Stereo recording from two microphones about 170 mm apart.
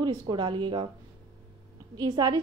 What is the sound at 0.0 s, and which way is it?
Speech, 25° right (ahead or behind).